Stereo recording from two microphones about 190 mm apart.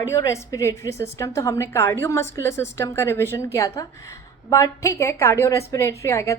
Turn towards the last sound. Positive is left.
turn(degrees=15)  # may be behind; listen again after turning